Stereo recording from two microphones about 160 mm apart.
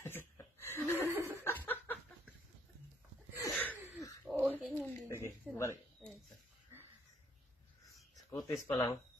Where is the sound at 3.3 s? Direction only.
10° left (ahead or behind).